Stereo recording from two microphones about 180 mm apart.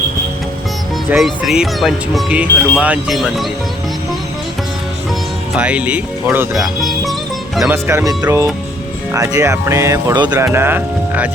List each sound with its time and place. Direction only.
1.1 s speech: centre (ahead or behind)
5.5 s speech: 5° right (ahead or behind)
7.7 s speech: 15° right (ahead or behind)